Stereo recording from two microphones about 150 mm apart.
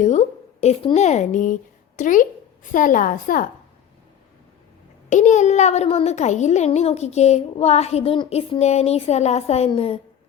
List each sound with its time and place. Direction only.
0.0 s a sound: 50° left (ahead or behind)
0.9 s a child's voice: 50° left (ahead or behind); by 3.5 s 65° left (ahead or behind)
5.0 s a child's voice: 50° left (ahead or behind)